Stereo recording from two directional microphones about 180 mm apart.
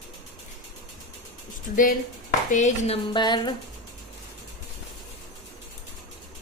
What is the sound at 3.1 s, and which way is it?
Speech, 25° left (ahead or behind).